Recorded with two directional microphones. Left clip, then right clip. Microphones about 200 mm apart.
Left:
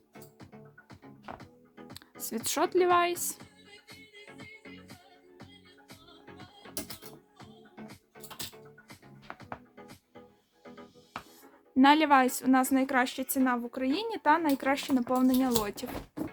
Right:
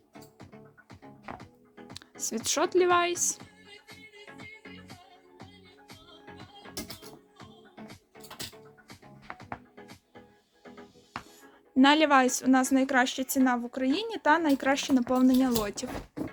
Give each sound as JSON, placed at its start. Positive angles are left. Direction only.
{"t": 1.2, "sound": "music", "side_deg": -20}
{"t": 1.9, "sound": "speech", "side_deg": 5}
{"t": 9.2, "sound": "music", "side_deg": -20}
{"t": 11.7, "sound": "speech", "side_deg": 5}